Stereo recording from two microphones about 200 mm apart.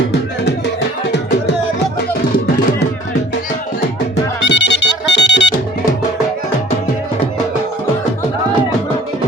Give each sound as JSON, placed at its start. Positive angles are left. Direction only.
{"t": 4.4, "sound": "music", "side_deg": 65}